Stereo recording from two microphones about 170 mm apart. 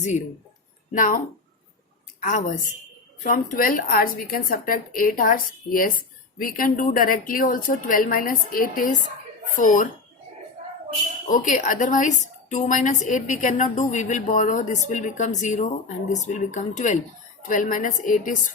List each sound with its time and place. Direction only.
0.9 s a woman's voice: 50° left (ahead or behind)
2.2 s a woman's voice: 45° left (ahead or behind)
11.3 s a woman's voice: 50° left (ahead or behind)